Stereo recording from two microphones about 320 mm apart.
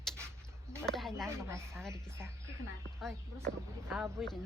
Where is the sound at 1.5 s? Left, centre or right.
Centre.